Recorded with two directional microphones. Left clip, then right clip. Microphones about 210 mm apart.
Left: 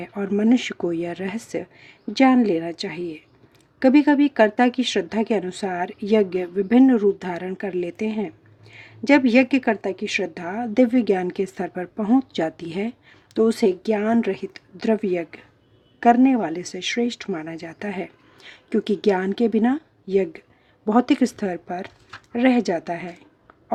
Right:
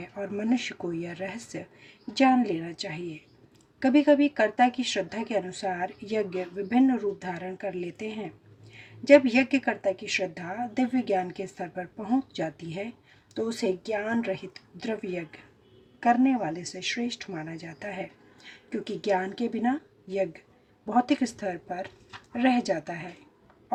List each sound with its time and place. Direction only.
0.0 s speech: 45° left (ahead or behind)